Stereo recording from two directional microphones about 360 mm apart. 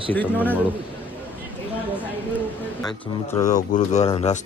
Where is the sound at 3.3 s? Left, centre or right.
Centre.